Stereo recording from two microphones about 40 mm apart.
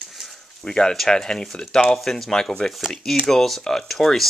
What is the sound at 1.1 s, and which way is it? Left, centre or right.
Speech, centre.